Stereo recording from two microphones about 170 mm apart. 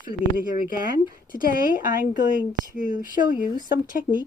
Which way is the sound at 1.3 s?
55° left (ahead or behind).